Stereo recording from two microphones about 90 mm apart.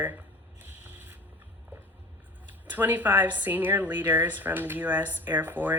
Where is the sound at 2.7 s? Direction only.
20° right (ahead or behind).